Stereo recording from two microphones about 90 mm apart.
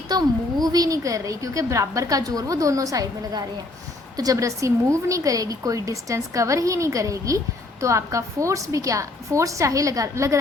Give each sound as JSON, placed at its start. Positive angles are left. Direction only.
{"t": 0.1, "sound": "a woman's voice", "side_deg": -45}